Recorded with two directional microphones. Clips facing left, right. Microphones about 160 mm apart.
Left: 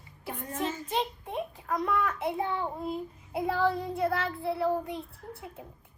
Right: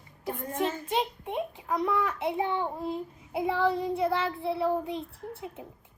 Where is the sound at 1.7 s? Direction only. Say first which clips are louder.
Right 1 dB; 10° right (ahead or behind).